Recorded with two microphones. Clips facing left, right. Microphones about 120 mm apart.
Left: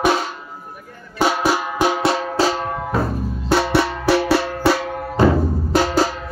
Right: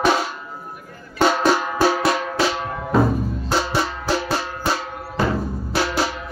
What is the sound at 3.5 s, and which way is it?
Music, 65° left (ahead or behind).